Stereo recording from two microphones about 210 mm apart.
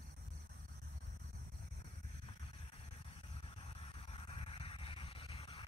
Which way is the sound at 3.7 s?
25° left (ahead or behind).